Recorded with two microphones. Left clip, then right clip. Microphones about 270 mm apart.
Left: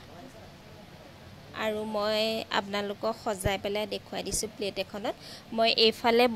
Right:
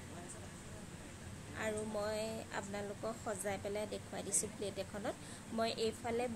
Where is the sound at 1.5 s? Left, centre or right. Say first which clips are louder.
Left 9 dB; left.